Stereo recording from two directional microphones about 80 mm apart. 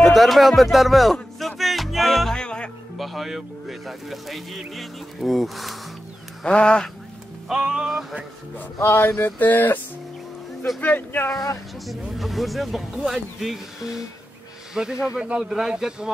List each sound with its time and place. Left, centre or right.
0.0 s speech: centre
1.1 s music: centre
3.0 s speech: centre
6.4 s speech: centre
7.4 s speech: centre
8.8 s male singing: left
10.8 s male singing: left
12.1 s speech: centre